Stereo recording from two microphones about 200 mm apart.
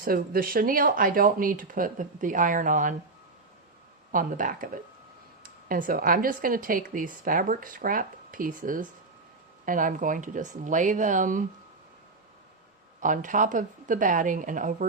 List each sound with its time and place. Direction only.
0.0 s speech: 45° right (ahead or behind)
4.1 s speech: 40° right (ahead or behind)
13.0 s speech: 40° right (ahead or behind)